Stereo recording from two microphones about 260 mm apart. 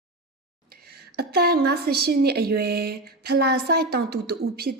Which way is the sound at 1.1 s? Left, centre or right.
Right.